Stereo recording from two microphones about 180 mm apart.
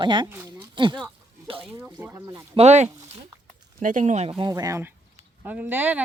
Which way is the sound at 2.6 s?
40° right (ahead or behind).